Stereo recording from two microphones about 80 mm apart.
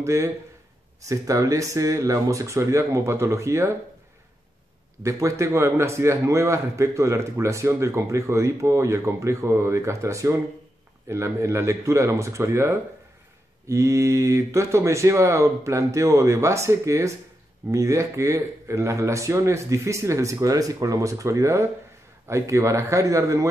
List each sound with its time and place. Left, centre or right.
0.0 s a man's voice: right
5.0 s a man's voice: right